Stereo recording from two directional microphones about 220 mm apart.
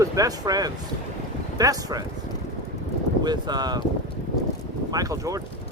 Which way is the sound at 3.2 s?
20° right (ahead or behind).